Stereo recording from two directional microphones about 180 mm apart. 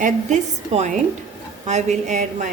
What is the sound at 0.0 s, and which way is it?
A woman's voice, 40° right (ahead or behind).